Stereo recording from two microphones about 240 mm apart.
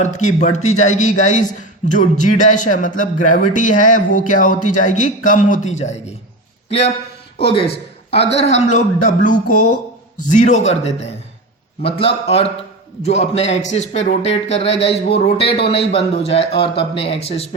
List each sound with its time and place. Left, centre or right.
0.0 s a man's voice: left